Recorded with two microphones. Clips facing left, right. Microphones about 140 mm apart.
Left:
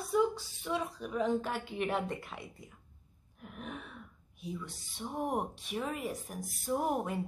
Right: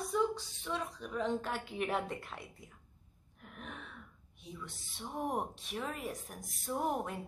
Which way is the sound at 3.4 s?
5° left (ahead or behind).